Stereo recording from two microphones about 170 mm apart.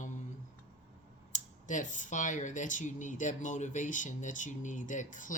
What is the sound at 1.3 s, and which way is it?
Speech, 45° left (ahead or behind).